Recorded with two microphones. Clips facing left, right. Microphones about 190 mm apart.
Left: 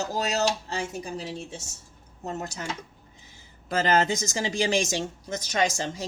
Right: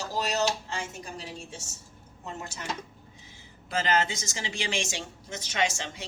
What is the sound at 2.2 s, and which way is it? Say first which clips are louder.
Speech: left 6 dB; 40° left (ahead or behind).